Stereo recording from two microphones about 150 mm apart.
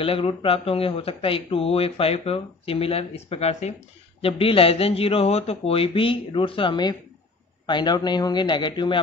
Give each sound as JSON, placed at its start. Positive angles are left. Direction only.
{"t": 0.0, "sound": "speech", "side_deg": 35}